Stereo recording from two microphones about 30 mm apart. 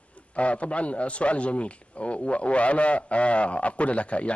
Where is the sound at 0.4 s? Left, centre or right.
Left.